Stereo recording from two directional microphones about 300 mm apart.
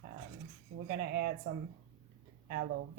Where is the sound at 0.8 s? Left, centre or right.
Right.